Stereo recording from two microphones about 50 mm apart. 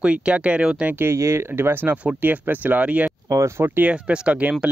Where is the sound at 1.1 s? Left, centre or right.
Right.